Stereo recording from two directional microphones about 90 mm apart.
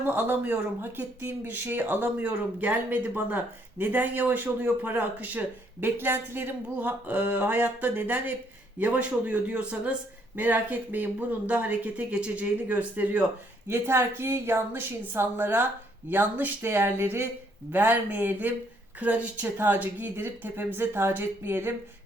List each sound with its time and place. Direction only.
0.1 s speech: 20° right (ahead or behind)